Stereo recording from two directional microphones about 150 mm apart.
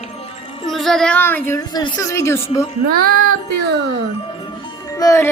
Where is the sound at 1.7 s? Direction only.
25° left (ahead or behind).